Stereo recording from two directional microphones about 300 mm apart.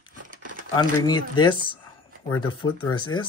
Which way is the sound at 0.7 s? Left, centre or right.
Centre.